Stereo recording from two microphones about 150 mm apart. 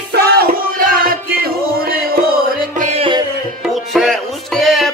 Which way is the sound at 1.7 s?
90° right.